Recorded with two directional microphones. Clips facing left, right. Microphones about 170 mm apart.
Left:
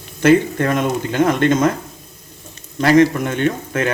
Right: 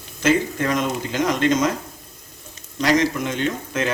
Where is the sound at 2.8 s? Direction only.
55° left (ahead or behind).